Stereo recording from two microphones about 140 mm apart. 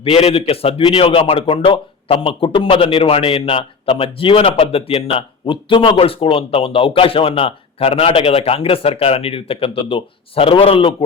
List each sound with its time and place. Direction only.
0.0 s a man's voice: 45° left (ahead or behind)